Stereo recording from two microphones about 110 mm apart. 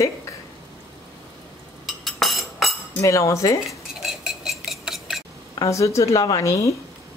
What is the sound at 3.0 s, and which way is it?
Speech, 30° left (ahead or behind).